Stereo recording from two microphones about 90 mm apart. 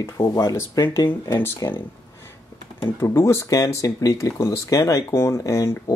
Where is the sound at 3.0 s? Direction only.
30° left (ahead or behind).